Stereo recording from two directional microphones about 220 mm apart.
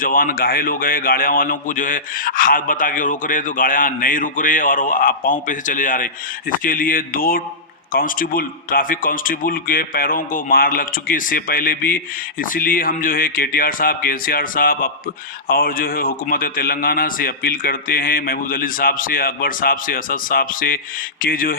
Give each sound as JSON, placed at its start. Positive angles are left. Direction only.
{"t": 0.0, "sound": "a man's voice", "side_deg": 40}